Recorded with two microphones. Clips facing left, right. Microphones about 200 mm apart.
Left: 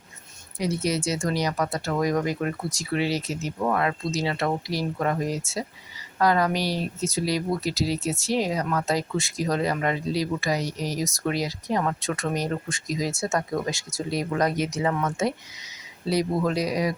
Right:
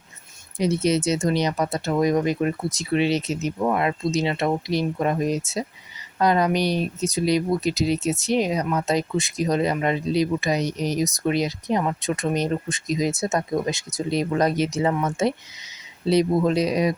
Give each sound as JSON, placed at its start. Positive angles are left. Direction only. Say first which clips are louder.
{"t": 0.6, "sound": "speech", "louder": "right 5 dB", "side_deg": -20}